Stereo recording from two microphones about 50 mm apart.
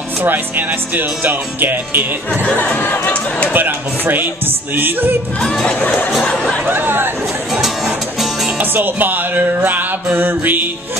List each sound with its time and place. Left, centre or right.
0.2 s music: right
2.6 s speech: left
3.5 s music: right
5.4 s speech: centre
6.7 s speech: right
7.6 s music: centre
8.5 s music: right